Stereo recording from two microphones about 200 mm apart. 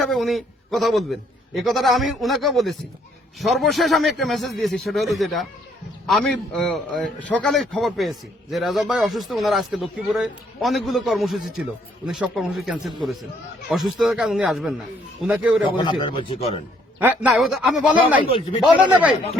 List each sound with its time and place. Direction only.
0.0 s a man's voice: centre (ahead or behind)
15.8 s speech: 25° left (ahead or behind)
17.0 s a man's voice: 5° right (ahead or behind)
18.3 s speech: 25° left (ahead or behind)